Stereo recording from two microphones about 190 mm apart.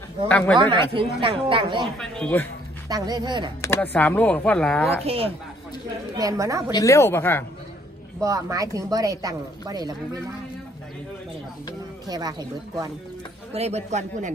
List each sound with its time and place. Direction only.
0.3 s speech: 5° left (ahead or behind)
0.6 s a woman's voice: 25° right (ahead or behind)
2.0 s speech: 5° left (ahead or behind)
2.9 s a woman's voice: 20° right (ahead or behind)
3.6 s speech: 10° left (ahead or behind)
5.0 s a man's voice: 30° right (ahead or behind)
6.1 s a woman's voice: 20° right (ahead or behind)
6.7 s speech: 15° left (ahead or behind)
8.2 s a woman's voice: 15° right (ahead or behind)
12.1 s a woman's voice: 20° right (ahead or behind)
13.5 s a man's voice: 35° right (ahead or behind)